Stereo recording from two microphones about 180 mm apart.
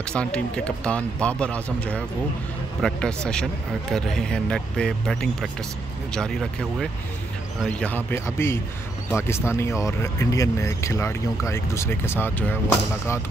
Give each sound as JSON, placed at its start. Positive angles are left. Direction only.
{"t": 0.1, "sound": "speech", "side_deg": 5}